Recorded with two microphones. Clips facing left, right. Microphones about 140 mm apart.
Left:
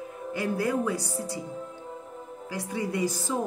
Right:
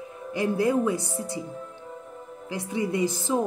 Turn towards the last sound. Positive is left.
turn(degrees=-20)  # may be behind; listen again after turning